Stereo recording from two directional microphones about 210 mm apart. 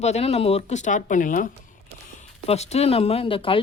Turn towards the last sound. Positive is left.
turn(degrees=25)  # may be behind; listen again after turning